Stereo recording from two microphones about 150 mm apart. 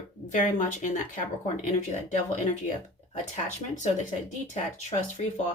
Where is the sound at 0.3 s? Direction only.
55° left (ahead or behind).